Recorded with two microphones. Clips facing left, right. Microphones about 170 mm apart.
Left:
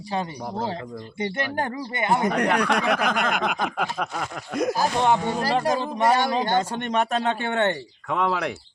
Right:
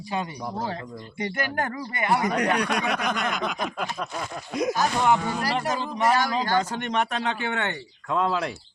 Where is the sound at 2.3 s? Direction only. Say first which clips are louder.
Left 2 dB; 55° left (ahead or behind); by 4.6 s 75° left (ahead or behind).